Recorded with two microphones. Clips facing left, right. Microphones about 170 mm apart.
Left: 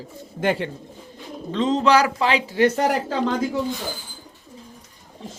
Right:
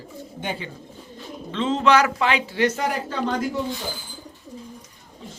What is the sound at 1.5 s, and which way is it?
A man's voice, 40° left (ahead or behind).